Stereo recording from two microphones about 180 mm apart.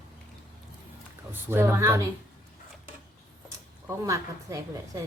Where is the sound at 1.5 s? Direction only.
15° right (ahead or behind).